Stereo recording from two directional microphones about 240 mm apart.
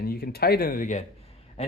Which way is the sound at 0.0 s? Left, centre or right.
Left.